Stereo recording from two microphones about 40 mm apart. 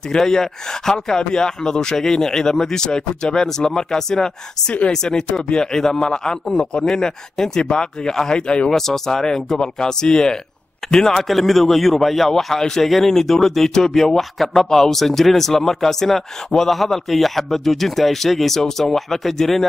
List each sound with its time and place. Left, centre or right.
0.2 s a man's voice: centre
8.6 s a man's voice: centre